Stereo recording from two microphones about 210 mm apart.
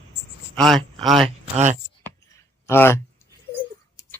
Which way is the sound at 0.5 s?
5° left (ahead or behind).